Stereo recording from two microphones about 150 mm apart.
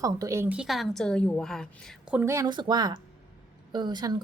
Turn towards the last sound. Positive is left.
turn(degrees=-30)  # may be behind; listen again after turning